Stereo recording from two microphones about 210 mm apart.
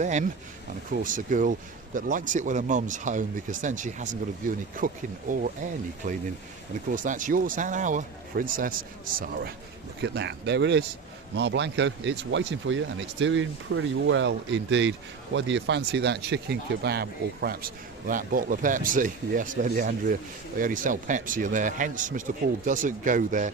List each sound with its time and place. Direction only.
0.0 s speech: 35° right (ahead or behind)
6.0 s speech: 35° right (ahead or behind)
10.0 s speech: 55° right (ahead or behind); by 23.5 s 40° right (ahead or behind)